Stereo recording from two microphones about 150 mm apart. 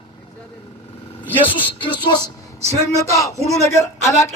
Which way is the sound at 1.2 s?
10° right (ahead or behind).